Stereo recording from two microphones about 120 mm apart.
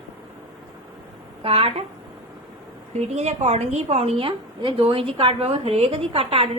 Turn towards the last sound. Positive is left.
turn(degrees=-50)  # may be behind; listen again after turning